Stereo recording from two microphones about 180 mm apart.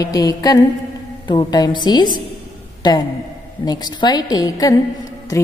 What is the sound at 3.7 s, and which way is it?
A woman's voice, 25° left (ahead or behind).